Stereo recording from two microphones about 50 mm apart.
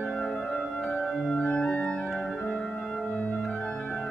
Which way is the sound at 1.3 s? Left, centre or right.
Left.